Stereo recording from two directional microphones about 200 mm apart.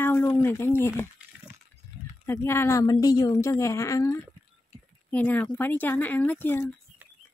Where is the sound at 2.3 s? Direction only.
15° left (ahead or behind).